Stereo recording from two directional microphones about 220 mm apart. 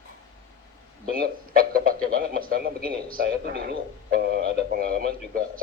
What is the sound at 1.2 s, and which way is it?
Speech, 40° right (ahead or behind).